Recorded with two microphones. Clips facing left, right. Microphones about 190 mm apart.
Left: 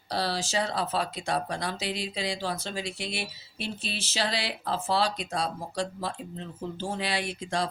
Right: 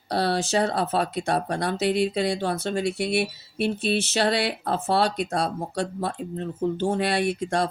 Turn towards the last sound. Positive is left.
turn(degrees=-60)  # may be behind; listen again after turning